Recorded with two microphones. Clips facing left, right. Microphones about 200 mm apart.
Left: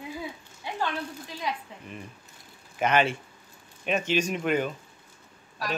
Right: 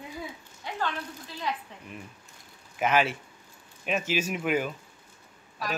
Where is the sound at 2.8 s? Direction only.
5° right (ahead or behind).